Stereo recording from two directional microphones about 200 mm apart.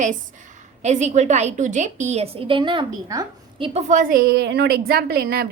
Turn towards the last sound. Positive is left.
turn(degrees=-50)  # may be behind; listen again after turning